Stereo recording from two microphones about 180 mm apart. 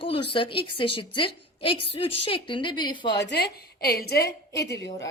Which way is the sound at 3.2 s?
65° left (ahead or behind).